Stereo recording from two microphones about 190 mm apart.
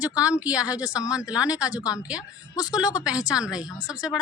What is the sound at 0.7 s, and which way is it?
Speech, 20° left (ahead or behind).